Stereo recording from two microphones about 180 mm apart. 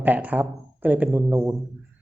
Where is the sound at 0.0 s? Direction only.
10° right (ahead or behind).